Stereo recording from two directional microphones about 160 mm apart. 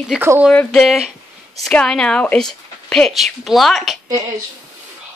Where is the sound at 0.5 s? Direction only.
Centre (ahead or behind).